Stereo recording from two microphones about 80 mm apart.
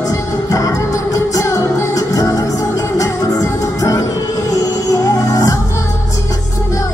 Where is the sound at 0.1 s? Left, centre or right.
Left.